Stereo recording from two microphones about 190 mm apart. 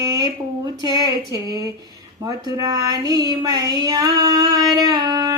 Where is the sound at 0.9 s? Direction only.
20° right (ahead or behind).